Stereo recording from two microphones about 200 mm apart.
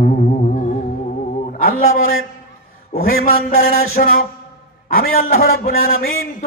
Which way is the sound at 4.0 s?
45° left (ahead or behind).